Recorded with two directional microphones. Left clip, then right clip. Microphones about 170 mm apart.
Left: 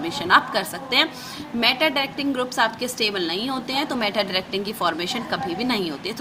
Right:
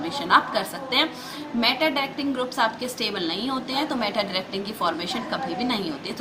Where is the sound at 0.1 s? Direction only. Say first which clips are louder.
Left 2 dB; 40° left (ahead or behind).